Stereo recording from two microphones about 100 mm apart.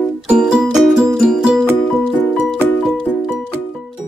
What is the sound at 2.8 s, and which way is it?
Music, 5° right (ahead or behind).